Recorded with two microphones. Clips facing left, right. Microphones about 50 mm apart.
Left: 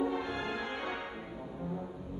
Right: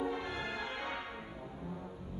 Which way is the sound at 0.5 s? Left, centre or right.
Centre.